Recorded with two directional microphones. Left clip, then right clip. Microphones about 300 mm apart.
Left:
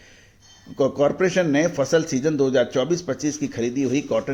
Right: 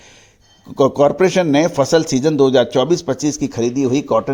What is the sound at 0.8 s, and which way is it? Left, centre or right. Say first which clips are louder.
A man's voice: right 7 dB; right.